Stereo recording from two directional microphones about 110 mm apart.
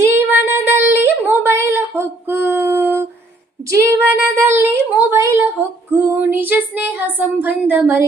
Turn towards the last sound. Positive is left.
turn(degrees=-15)  # may be behind; listen again after turning